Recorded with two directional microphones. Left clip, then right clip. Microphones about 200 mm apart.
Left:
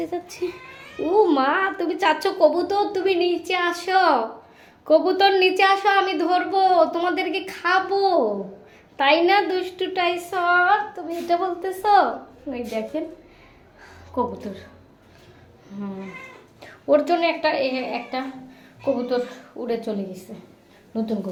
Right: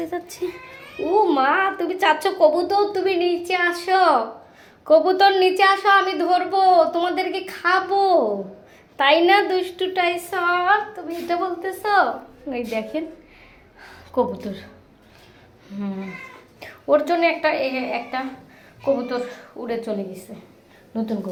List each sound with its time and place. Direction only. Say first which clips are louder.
1.2 s a woman's voice: right 1 dB; 15° left (ahead or behind)
12.5 s a woman's voice: right 2 dB; 5° right (ahead or behind)
13.8 s a sound: right 3 dB; 5° right (ahead or behind)
15.7 s a woman's voice: right 3 dB; 5° right (ahead or behind)
16.9 s a woman's voice: right 1 dB; 10° left (ahead or behind)
20.9 s a woman's voice: even; 5° left (ahead or behind)